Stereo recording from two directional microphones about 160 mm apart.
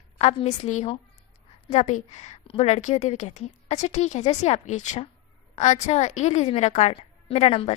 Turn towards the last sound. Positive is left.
turn(degrees=40)  # may be behind; listen again after turning